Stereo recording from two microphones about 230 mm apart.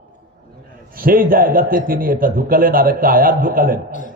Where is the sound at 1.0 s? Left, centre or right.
Right.